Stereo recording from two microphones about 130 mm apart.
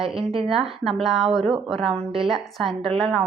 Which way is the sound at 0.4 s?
Centre (ahead or behind).